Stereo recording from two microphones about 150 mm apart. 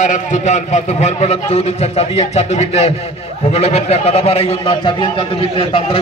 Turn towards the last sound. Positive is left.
turn(degrees=35)  # may be behind; listen again after turning